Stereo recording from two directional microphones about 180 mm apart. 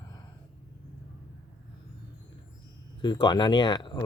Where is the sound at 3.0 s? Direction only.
25° left (ahead or behind).